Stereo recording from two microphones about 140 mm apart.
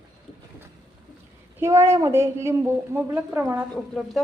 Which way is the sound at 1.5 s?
20° right (ahead or behind).